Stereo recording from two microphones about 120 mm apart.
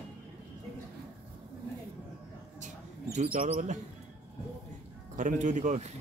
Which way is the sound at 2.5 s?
80° right.